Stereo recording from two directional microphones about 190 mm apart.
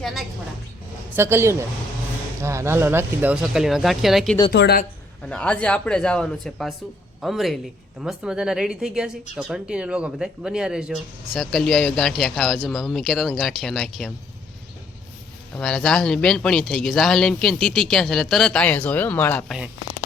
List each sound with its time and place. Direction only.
0.0 s a woman's voice: centre (ahead or behind)
1.1 s speech: 15° right (ahead or behind)
4.5 s speech: 55° left (ahead or behind)
5.3 s speech: 5° left (ahead or behind)
15.5 s speech: 5° left (ahead or behind)